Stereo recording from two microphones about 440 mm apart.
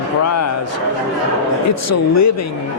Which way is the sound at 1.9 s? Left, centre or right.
Left.